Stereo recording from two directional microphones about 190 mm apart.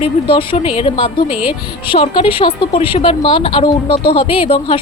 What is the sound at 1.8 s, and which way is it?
A woman's voice, 25° left (ahead or behind).